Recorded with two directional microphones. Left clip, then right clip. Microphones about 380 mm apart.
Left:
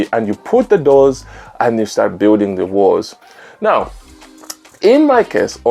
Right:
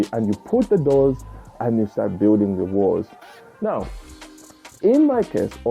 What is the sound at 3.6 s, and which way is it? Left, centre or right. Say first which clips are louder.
Speech: left 11 dB; centre.